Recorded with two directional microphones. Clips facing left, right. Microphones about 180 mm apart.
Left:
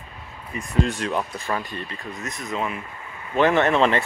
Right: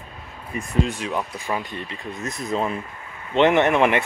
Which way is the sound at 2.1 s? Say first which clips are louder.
Right 4 dB; 30° right (ahead or behind).